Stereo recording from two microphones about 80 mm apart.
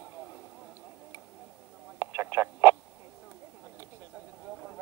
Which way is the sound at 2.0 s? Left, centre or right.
Right.